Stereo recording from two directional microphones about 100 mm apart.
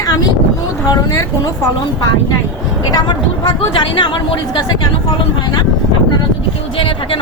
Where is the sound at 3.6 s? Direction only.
60° left (ahead or behind).